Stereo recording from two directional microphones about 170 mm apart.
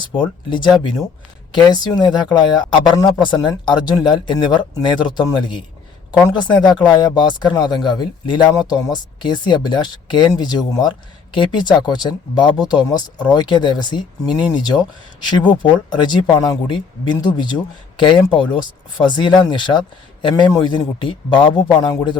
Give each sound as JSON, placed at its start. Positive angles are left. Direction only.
{"t": 0.0, "sound": "speech", "side_deg": 25}